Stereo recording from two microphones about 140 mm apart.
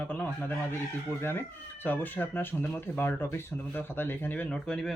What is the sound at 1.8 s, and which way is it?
Speech, 15° left (ahead or behind).